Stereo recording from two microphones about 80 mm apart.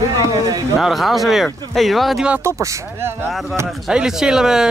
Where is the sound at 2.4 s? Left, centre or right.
Right.